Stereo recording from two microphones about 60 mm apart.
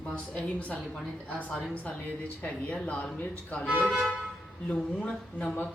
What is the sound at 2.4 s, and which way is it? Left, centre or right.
Speech, centre.